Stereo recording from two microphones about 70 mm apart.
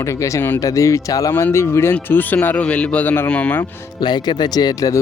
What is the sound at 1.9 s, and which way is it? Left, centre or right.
Speech, left.